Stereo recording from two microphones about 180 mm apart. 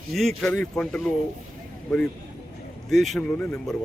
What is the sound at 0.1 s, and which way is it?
Speech, centre (ahead or behind).